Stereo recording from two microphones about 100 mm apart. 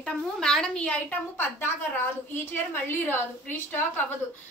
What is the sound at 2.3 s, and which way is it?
A woman's voice, 20° left (ahead or behind).